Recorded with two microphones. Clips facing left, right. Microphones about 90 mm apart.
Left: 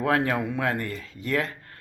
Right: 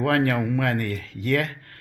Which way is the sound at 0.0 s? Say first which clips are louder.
Right 2 dB; 20° left (ahead or behind).